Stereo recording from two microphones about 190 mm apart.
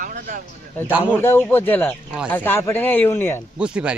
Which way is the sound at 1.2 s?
10° left (ahead or behind).